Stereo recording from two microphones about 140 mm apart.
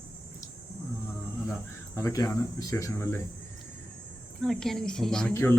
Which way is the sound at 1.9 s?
25° left (ahead or behind).